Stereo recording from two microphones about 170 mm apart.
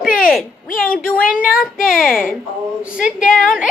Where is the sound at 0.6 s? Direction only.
55° left (ahead or behind).